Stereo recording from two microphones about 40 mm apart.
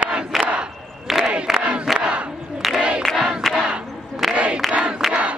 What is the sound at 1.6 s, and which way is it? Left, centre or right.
Battle cry, right.